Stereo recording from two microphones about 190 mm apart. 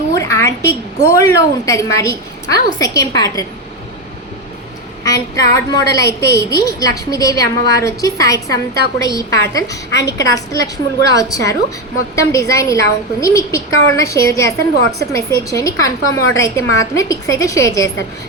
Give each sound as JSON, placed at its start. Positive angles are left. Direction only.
{"t": 0.1, "sound": "a sound", "side_deg": 15}
{"t": 1.0, "sound": "a woman's voice", "side_deg": 15}
{"t": 5.0, "sound": "a woman's voice", "side_deg": 15}